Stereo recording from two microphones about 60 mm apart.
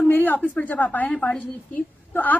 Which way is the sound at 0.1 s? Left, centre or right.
Left.